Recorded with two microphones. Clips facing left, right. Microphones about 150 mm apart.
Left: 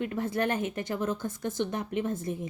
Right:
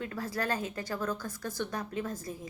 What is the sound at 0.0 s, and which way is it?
A woman's voice, 25° left (ahead or behind).